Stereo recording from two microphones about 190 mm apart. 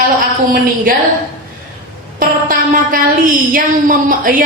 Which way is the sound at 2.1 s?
45° right (ahead or behind).